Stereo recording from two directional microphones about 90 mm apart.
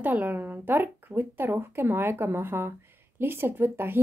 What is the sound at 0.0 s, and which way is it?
A woman's voice, 20° right (ahead or behind).